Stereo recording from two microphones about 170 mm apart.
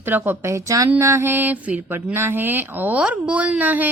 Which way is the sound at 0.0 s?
10° right (ahead or behind).